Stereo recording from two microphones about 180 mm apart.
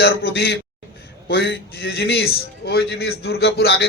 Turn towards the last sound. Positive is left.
turn(degrees=65)  # may be behind; listen again after turning